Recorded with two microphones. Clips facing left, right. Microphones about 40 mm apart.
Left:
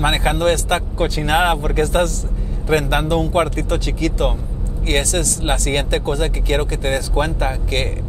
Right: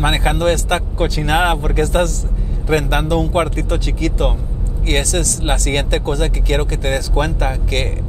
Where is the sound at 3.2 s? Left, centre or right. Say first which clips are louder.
Even; right.